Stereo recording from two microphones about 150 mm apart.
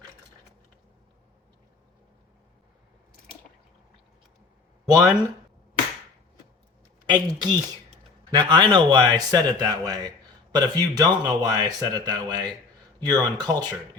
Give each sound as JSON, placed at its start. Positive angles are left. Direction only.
{"t": 4.9, "sound": "speech", "side_deg": -25}
{"t": 7.1, "sound": "speech", "side_deg": -30}